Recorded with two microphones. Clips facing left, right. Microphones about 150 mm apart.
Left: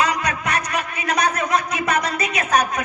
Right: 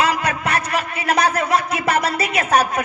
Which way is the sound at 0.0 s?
30° right (ahead or behind).